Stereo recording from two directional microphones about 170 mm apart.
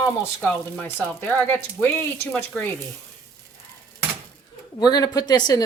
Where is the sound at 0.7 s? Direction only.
10° left (ahead or behind).